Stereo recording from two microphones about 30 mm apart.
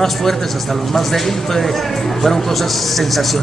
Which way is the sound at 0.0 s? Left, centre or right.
Centre.